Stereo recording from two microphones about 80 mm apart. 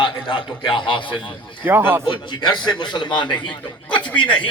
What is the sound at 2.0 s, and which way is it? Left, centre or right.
A man's voice, left.